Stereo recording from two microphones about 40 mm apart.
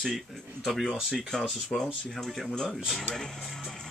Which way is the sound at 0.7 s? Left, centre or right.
Centre.